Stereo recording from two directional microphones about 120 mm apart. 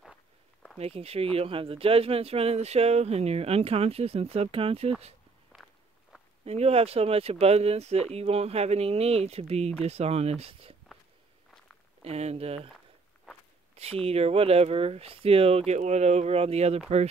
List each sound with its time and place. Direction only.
0.0 s a sound: 5° left (ahead or behind)
0.7 s speech: 60° right (ahead or behind)
5.5 s walk: 10° right (ahead or behind)
6.4 s speech: 60° right (ahead or behind)
12.0 s speech: 60° right (ahead or behind)
13.7 s speech: 55° right (ahead or behind)